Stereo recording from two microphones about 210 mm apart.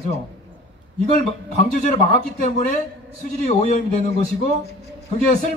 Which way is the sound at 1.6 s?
35° left (ahead or behind).